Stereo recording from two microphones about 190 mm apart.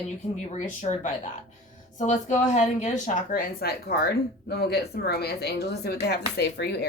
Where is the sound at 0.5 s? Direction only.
40° left (ahead or behind).